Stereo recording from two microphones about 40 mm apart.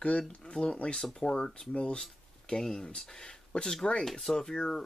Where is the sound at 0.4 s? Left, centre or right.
Left.